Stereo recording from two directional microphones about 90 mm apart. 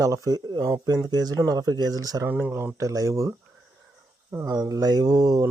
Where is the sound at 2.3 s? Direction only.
20° right (ahead or behind); by 3.3 s 35° right (ahead or behind).